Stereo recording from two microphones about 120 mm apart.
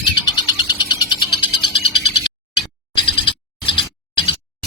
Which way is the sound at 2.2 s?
45° left (ahead or behind).